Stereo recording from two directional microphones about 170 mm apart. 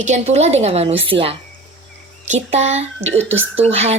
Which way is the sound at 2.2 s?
40° right (ahead or behind).